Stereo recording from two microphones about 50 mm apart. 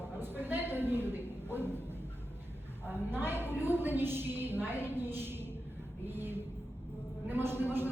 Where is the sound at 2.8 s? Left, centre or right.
Right.